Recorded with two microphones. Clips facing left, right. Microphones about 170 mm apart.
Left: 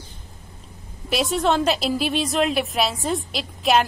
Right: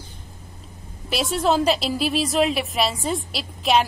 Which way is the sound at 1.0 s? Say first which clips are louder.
Left 1 dB; centre (ahead or behind).